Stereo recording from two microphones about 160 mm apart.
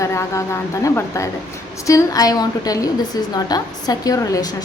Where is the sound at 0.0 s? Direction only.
20° left (ahead or behind).